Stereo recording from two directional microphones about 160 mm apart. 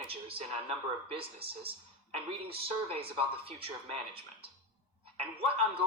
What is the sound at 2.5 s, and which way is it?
Speech, 35° right (ahead or behind).